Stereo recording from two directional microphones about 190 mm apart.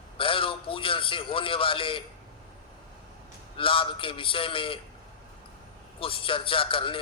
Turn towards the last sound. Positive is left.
turn(degrees=30)  # may be behind; listen again after turning